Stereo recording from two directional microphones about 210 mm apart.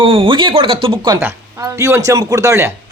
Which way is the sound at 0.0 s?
25° right (ahead or behind).